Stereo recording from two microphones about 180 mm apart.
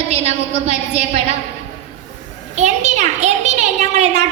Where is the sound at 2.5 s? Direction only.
40° right (ahead or behind).